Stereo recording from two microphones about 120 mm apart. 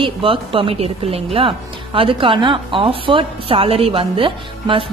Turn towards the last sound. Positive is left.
turn(degrees=-45)  # may be behind; listen again after turning